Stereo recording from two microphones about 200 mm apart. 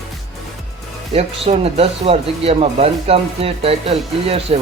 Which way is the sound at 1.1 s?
35° right (ahead or behind).